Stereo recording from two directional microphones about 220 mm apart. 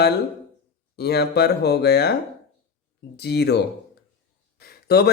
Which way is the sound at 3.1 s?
50° left (ahead or behind).